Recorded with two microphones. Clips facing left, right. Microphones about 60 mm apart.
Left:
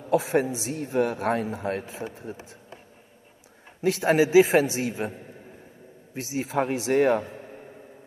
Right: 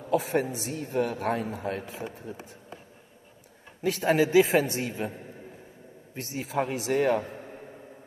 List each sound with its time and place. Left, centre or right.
0.1 s a man's voice: left
4.0 s a man's voice: left
6.5 s a man's voice: left